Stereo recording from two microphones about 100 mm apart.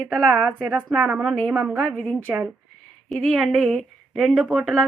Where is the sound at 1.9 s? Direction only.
10° left (ahead or behind).